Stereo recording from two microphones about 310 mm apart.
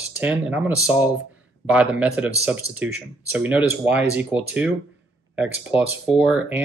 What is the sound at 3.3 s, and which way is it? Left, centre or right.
Speech, centre.